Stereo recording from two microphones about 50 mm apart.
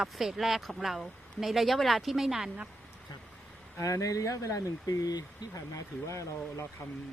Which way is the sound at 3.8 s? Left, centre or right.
Left.